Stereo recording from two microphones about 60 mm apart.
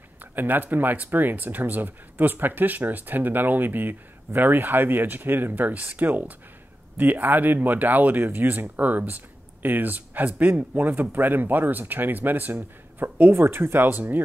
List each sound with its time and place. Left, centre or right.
0.2 s speech: right